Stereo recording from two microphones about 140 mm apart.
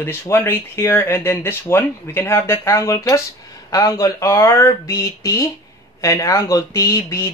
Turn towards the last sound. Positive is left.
turn(degrees=20)  # may be behind; listen again after turning